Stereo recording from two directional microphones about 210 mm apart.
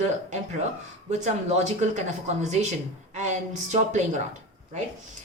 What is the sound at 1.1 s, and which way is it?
A woman's voice, 35° right (ahead or behind).